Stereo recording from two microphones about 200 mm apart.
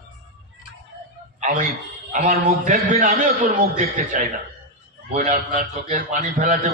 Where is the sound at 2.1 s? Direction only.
40° right (ahead or behind).